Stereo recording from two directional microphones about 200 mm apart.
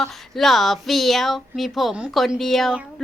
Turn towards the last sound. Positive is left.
turn(degrees=0)  # may be behind; listen again after turning